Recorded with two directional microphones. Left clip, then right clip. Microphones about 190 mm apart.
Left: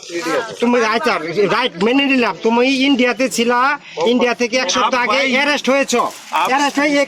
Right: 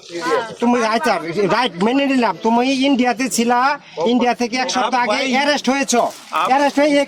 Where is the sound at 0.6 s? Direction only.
75° right (ahead or behind).